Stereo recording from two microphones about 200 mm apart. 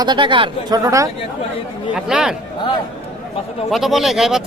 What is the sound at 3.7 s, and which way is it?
Speech, centre (ahead or behind).